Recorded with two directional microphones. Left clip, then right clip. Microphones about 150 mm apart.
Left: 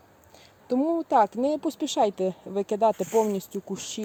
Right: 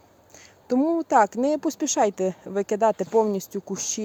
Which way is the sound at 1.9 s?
40° right (ahead or behind).